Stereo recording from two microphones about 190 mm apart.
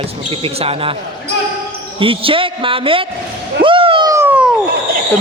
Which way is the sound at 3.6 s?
25° right (ahead or behind).